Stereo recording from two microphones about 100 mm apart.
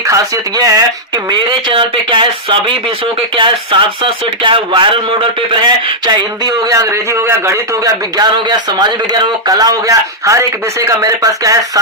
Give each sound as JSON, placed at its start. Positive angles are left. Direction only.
{"t": 0.1, "sound": "speech", "side_deg": -40}
{"t": 1.3, "sound": "speech", "side_deg": -55}
{"t": 5.5, "sound": "a sound", "side_deg": -50}
{"t": 6.7, "sound": "a man's voice", "side_deg": -30}
{"t": 8.2, "sound": "a sound", "side_deg": -45}
{"t": 9.5, "sound": "speech", "side_deg": -40}